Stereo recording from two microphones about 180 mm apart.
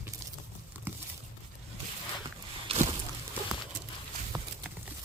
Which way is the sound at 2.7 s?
35° right (ahead or behind).